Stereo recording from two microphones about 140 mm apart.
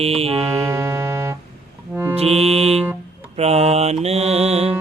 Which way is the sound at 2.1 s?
45° right (ahead or behind).